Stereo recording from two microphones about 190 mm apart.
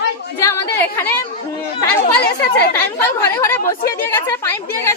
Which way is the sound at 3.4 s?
15° left (ahead or behind).